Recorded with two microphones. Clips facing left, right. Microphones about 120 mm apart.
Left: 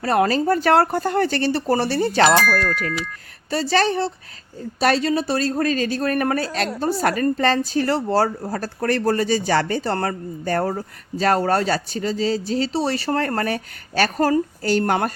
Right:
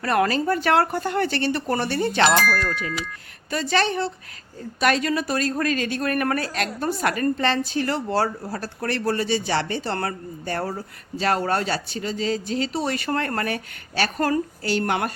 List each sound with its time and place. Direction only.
0.0 s a woman's voice: 30° left (ahead or behind)
3.5 s a woman's voice: 35° left (ahead or behind)